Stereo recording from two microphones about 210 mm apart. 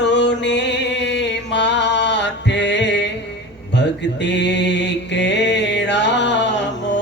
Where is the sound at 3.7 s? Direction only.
55° left (ahead or behind).